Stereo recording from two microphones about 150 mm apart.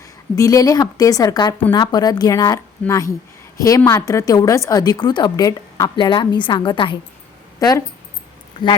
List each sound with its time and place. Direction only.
0.3 s a woman's voice: 20° left (ahead or behind)